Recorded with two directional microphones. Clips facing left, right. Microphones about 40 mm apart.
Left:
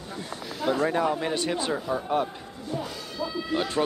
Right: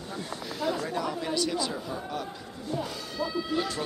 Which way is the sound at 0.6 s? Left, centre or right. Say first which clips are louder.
Left 6 dB; left.